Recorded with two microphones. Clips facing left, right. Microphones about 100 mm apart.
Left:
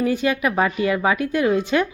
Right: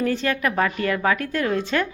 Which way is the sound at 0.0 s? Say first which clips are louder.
Left 2 dB; 10° left (ahead or behind).